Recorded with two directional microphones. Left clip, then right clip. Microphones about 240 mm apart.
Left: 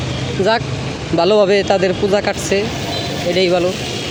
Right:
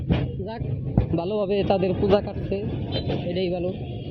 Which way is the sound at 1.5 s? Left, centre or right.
Centre.